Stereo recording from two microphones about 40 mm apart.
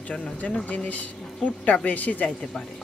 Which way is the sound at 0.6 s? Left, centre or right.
Left.